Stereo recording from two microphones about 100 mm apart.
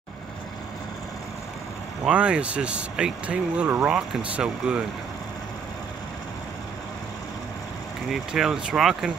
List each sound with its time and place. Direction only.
2.0 s speech: 10° right (ahead or behind)
8.1 s speech: 5° right (ahead or behind)